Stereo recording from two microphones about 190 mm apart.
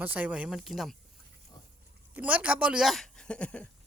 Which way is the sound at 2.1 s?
10° right (ahead or behind).